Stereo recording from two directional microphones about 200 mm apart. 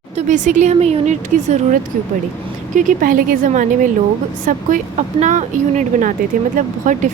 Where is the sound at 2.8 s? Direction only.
45° right (ahead or behind).